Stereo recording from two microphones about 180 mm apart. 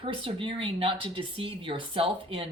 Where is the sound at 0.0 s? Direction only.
30° right (ahead or behind).